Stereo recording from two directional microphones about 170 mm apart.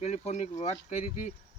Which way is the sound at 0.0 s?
40° left (ahead or behind).